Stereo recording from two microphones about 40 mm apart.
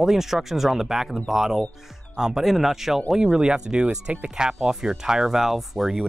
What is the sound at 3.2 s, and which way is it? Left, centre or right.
Speech, centre.